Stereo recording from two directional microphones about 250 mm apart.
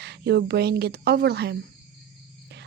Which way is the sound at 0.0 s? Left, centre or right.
Right.